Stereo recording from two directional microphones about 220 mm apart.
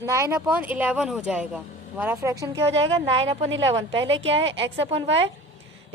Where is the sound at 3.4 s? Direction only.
60° right (ahead or behind).